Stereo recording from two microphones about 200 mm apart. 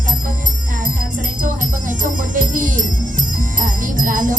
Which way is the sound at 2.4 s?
40° right (ahead or behind).